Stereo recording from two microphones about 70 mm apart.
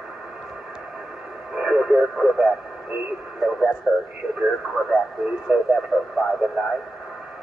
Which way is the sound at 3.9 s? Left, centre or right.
Centre.